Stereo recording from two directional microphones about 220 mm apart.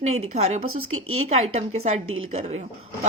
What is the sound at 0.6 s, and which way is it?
Speech, 75° right (ahead or behind).